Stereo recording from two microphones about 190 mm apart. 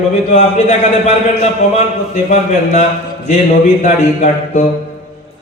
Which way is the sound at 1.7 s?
35° left (ahead or behind).